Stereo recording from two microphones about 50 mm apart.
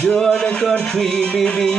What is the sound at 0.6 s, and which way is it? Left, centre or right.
Speech, centre.